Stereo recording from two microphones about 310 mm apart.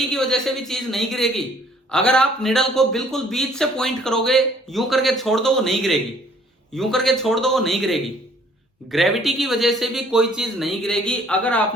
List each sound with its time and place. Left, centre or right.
0.1 s a man's voice: centre